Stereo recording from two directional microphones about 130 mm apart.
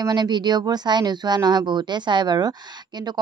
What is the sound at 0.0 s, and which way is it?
Speech, 35° right (ahead or behind).